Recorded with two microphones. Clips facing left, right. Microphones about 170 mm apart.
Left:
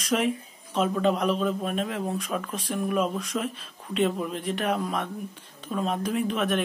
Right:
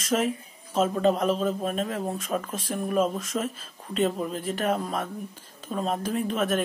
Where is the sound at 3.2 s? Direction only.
Centre (ahead or behind).